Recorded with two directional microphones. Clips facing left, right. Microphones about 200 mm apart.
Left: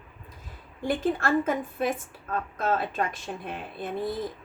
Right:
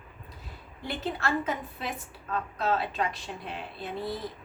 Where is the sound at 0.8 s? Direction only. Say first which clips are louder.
Left 7 dB; 50° left (ahead or behind).